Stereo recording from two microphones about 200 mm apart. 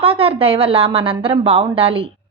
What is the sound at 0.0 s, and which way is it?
A woman's voice, 30° right (ahead or behind).